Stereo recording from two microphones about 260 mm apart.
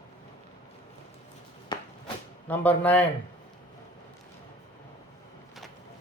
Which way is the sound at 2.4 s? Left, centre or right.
Centre.